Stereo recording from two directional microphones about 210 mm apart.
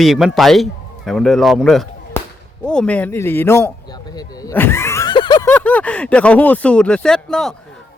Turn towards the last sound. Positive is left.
turn(degrees=5)  # may be behind; listen again after turning